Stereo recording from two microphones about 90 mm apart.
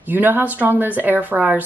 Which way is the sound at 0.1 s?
20° right (ahead or behind).